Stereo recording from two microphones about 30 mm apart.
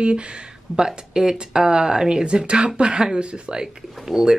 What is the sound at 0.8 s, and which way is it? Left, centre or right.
A woman's voice, right.